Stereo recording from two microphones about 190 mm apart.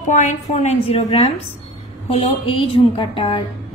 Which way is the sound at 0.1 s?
40° left (ahead or behind).